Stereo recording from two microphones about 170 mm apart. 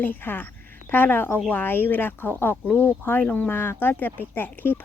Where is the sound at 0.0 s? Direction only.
10° left (ahead or behind).